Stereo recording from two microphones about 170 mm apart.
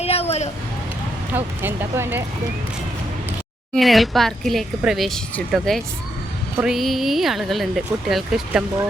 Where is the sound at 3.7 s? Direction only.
Centre (ahead or behind).